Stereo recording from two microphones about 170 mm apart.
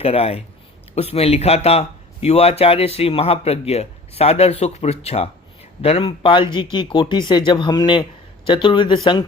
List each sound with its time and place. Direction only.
0.0 s speech: 35° left (ahead or behind)